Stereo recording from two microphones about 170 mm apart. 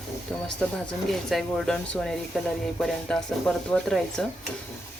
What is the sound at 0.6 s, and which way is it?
Speech, centre (ahead or behind).